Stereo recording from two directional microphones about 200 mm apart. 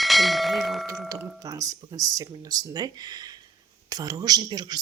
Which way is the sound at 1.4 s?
15° right (ahead or behind).